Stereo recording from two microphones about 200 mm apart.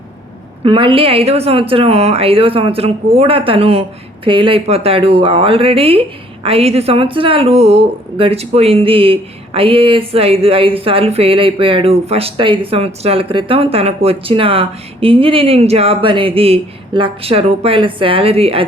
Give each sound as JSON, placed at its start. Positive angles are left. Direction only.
{"t": 0.6, "sound": "a woman's voice", "side_deg": -25}